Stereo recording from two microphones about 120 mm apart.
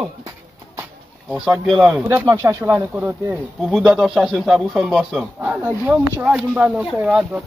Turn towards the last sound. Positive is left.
turn(degrees=-10)  # may be behind; listen again after turning